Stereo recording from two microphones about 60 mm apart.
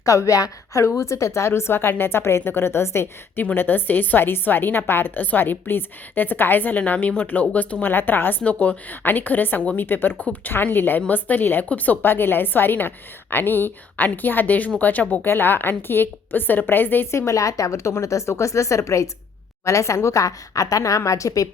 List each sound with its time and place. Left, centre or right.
0.0 s a woman's voice: left
3.5 s a woman's voice: left
17.1 s speech: left